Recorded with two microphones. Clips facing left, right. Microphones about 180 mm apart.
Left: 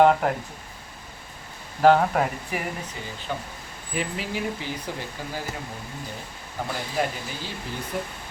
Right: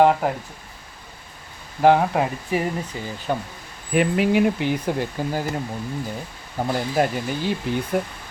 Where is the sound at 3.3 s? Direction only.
45° right (ahead or behind).